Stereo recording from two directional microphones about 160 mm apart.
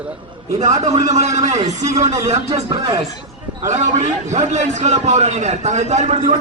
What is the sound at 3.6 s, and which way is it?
A man's voice, 50° right (ahead or behind).